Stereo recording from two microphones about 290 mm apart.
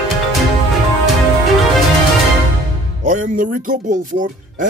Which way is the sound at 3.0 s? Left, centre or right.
Right.